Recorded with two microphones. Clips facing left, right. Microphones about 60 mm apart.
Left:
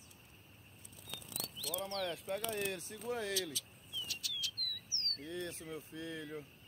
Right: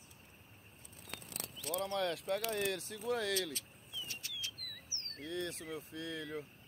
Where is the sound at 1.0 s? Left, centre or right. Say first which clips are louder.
Even; right.